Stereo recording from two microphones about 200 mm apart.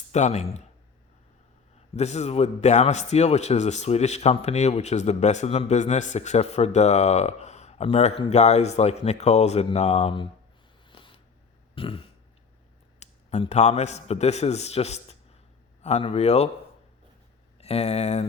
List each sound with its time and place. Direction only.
0.1 s a man's voice: 35° left (ahead or behind)
1.9 s a man's voice: 35° left (ahead or behind)
10.8 s a sound: 25° left (ahead or behind)
11.7 s throat clearing: 25° left (ahead or behind)
13.0 s a man's voice: 30° left (ahead or behind)
17.6 s a man's voice: 30° left (ahead or behind)